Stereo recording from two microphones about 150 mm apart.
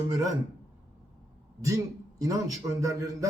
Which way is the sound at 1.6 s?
20° right (ahead or behind).